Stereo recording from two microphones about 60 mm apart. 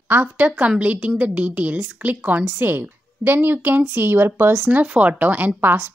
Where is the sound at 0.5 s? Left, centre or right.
Right.